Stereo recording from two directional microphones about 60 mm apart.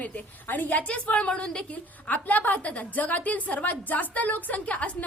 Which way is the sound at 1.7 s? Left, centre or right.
Left.